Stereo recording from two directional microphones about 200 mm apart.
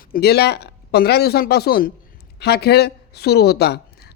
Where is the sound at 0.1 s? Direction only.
55° left (ahead or behind).